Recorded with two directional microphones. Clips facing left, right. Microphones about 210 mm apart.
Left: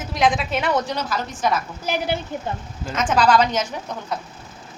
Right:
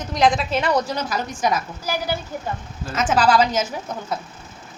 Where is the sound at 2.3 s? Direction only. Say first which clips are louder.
Left 2 dB; 25° left (ahead or behind).